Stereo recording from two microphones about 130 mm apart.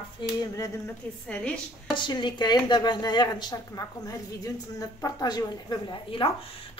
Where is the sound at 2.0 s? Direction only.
35° left (ahead or behind).